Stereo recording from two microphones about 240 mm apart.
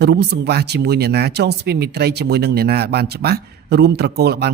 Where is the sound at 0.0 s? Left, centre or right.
Right.